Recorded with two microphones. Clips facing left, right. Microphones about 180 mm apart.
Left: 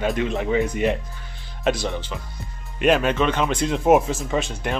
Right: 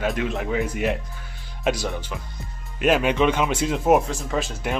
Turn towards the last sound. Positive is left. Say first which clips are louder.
# left 1 dB
turn(degrees=0)  # may be behind; listen again after turning